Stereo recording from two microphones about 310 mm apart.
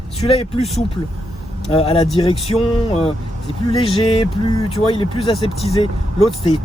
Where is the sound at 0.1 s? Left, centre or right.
Centre.